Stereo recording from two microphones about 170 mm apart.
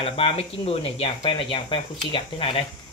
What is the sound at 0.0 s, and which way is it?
Speech, 35° left (ahead or behind).